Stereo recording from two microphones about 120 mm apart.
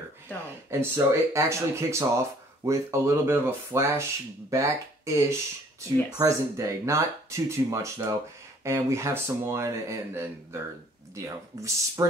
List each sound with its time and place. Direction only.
0.7 s speech: 20° right (ahead or behind)